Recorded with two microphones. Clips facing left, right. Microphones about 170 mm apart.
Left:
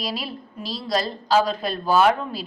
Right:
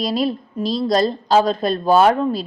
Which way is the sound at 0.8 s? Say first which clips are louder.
Right 4 dB; 40° right (ahead or behind).